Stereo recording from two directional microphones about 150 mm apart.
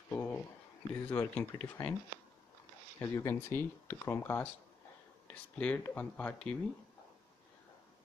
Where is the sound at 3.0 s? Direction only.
20° left (ahead or behind).